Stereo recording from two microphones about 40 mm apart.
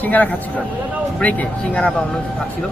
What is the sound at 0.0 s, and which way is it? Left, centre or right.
A man's voice, left.